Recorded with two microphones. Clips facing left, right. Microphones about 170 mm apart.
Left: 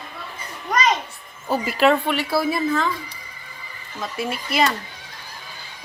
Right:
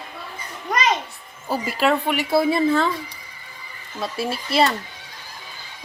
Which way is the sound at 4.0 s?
30° right (ahead or behind).